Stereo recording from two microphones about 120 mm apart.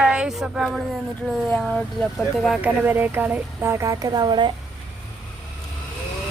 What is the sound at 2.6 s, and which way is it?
Speech, 15° right (ahead or behind).